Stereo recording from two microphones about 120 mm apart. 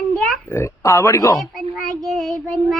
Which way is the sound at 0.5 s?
25° left (ahead or behind).